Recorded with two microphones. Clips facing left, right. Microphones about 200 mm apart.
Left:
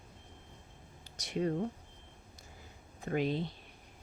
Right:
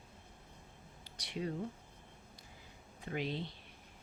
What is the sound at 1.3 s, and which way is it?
Speech, 50° left (ahead or behind).